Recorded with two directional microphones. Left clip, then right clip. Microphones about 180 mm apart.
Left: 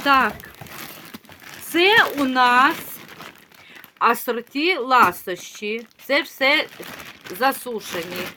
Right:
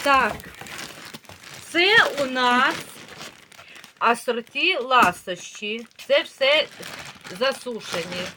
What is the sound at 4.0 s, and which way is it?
Speech, 55° left (ahead or behind).